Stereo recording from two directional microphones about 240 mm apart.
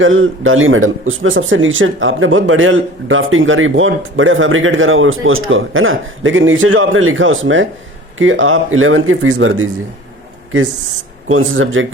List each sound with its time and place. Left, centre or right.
0.0 s speech: right
11.3 s speech: right